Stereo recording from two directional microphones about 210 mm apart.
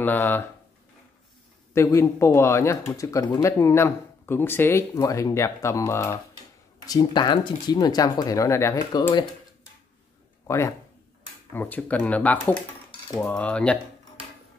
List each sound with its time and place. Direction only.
0.0 s speech: 10° left (ahead or behind)
1.7 s speech: 15° left (ahead or behind)
10.4 s speech: 15° left (ahead or behind)